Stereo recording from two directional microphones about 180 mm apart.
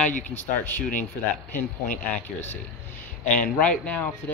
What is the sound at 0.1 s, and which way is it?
Speech, 40° left (ahead or behind).